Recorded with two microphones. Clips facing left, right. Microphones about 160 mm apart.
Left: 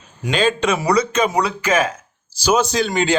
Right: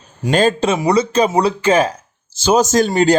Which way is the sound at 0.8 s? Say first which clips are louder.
Right 3 dB; 20° right (ahead or behind).